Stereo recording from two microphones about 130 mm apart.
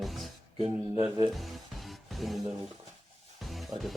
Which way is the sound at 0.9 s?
30° right (ahead or behind).